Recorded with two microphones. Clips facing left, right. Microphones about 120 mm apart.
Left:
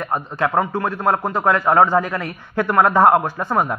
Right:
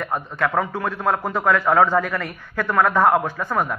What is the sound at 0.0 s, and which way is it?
A man's voice, 15° left (ahead or behind).